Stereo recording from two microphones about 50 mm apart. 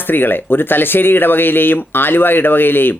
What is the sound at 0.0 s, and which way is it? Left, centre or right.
Speech, left.